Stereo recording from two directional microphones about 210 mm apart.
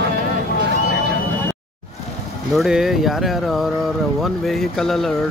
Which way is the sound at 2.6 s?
Centre (ahead or behind).